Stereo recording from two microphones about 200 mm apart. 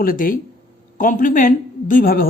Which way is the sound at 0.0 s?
45° left (ahead or behind).